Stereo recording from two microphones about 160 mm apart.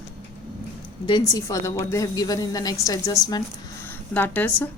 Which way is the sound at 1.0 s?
25° left (ahead or behind).